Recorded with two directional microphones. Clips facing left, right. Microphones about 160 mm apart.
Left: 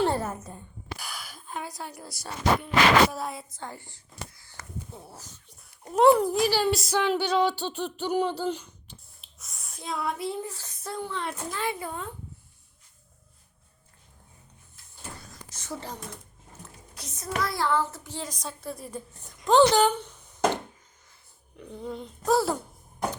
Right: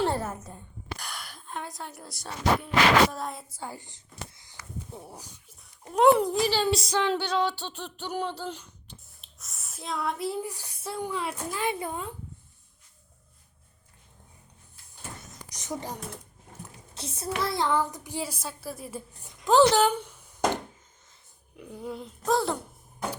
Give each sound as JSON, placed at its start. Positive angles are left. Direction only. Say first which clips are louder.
{"t": 0.9, "sound": "a woman's voice", "louder": "left 1 dB", "side_deg": 0}
{"t": 3.5, "sound": "speech", "louder": "right 1 dB", "side_deg": -10}
{"t": 5.9, "sound": "speech", "louder": "left 1 dB", "side_deg": 0}
{"t": 11.6, "sound": "speech", "louder": "right 2 dB", "side_deg": -20}
{"t": 15.2, "sound": "a sound", "louder": "even", "side_deg": -20}
{"t": 16.6, "sound": "a child's voice", "louder": "right 5 dB", "side_deg": -25}